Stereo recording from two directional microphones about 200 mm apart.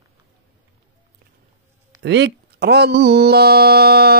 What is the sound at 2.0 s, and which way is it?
Speech, 55° right (ahead or behind).